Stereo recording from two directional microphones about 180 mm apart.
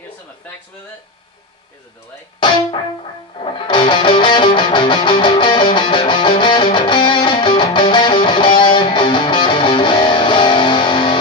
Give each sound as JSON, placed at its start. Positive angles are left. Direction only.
{"t": 2.4, "sound": "music", "side_deg": 25}